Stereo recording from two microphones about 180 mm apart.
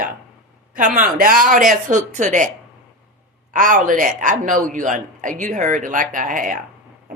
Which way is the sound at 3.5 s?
45° right (ahead or behind).